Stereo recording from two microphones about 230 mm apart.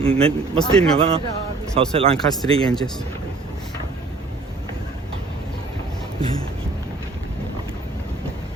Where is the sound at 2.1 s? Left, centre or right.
Centre.